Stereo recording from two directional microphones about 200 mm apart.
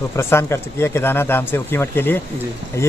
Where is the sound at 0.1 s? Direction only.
15° left (ahead or behind).